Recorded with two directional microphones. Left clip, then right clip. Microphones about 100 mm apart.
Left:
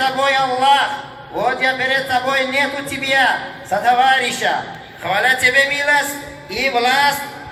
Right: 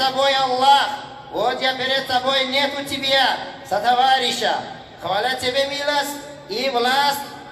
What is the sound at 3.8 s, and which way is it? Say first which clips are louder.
A man's voice: left 3 dB; 35° right (ahead or behind).